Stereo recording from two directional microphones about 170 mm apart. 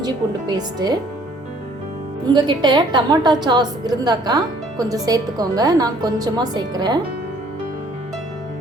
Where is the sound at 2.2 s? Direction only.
25° right (ahead or behind).